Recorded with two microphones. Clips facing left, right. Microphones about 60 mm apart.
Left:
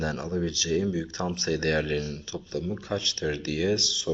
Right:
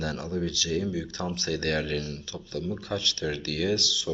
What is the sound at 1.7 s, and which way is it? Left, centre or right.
Speech, centre.